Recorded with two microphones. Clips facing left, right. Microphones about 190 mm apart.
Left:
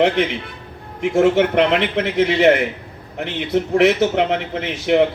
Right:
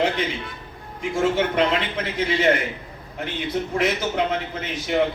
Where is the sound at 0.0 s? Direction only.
65° left (ahead or behind).